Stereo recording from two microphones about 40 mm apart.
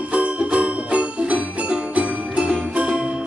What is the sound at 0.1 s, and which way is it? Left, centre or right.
Music, right.